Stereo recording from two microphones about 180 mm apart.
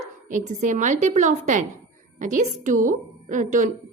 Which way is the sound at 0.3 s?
45° right (ahead or behind).